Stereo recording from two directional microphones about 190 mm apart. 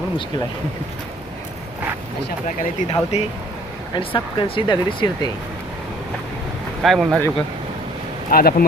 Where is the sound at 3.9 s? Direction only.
25° left (ahead or behind).